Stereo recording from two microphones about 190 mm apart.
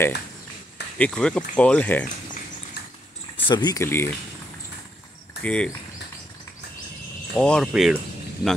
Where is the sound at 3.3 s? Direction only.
25° left (ahead or behind).